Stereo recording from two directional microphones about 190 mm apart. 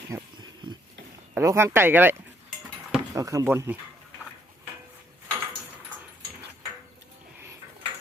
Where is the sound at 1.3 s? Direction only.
15° right (ahead or behind).